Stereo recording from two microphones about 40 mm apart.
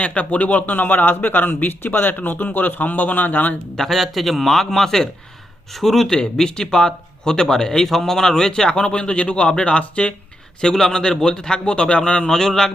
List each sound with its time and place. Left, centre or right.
0.0 s speech: left
3.8 s speech: centre
6.1 s speech: centre
10.6 s a man's voice: centre